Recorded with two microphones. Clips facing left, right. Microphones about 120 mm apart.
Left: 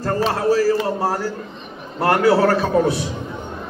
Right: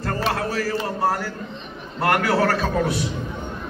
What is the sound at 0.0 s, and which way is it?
A man's voice, 30° left (ahead or behind).